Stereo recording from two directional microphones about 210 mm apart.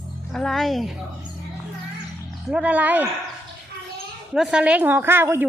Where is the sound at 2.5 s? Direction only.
5° right (ahead or behind).